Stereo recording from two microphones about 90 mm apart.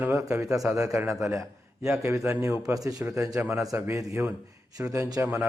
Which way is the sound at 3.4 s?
25° right (ahead or behind).